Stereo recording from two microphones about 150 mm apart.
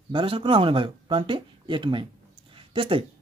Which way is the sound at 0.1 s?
35° right (ahead or behind).